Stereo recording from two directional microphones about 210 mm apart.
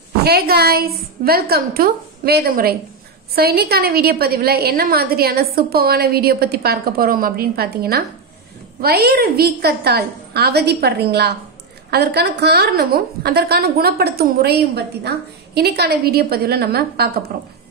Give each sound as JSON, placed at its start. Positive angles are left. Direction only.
{"t": 0.2, "sound": "a woman's voice", "side_deg": -50}